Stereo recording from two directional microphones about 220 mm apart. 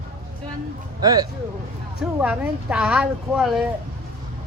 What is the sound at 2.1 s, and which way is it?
A woman's voice, 5° right (ahead or behind).